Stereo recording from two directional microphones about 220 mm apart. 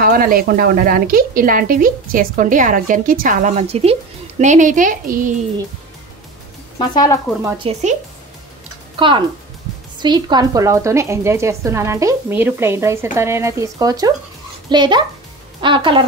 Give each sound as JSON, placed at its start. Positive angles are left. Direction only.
{"t": 0.0, "sound": "speech", "side_deg": -40}
{"t": 6.8, "sound": "speech", "side_deg": 20}
{"t": 7.4, "sound": "speech", "side_deg": -25}
{"t": 8.9, "sound": "a woman's voice", "side_deg": -20}